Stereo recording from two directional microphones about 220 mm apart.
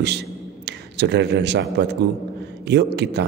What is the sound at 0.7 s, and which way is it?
A man's voice, 50° right (ahead or behind).